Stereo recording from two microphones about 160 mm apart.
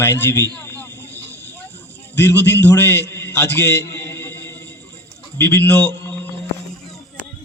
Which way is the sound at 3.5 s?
15° left (ahead or behind).